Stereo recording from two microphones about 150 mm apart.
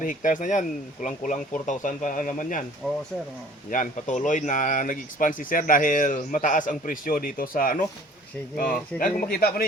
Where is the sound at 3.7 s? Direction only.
60° left (ahead or behind).